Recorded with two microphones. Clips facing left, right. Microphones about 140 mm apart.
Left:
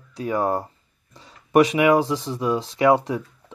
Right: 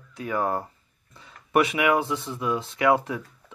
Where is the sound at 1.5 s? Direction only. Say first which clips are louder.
Left 5 dB; 30° left (ahead or behind).